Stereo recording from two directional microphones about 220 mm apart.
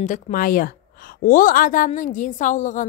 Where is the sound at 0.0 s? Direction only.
35° left (ahead or behind).